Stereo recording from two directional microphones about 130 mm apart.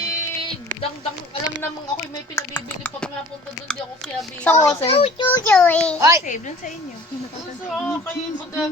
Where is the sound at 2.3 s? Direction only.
15° left (ahead or behind).